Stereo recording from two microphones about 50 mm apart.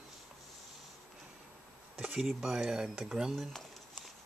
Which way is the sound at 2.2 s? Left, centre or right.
Centre.